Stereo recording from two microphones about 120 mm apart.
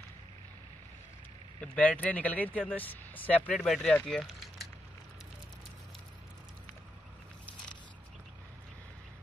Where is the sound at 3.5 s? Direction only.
5° left (ahead or behind).